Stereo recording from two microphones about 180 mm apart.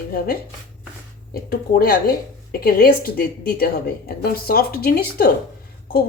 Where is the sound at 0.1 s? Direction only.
55° left (ahead or behind).